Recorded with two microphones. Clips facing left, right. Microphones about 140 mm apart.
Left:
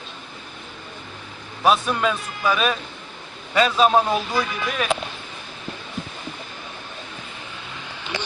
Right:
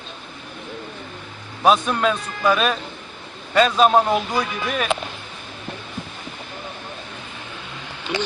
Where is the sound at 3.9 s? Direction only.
20° right (ahead or behind).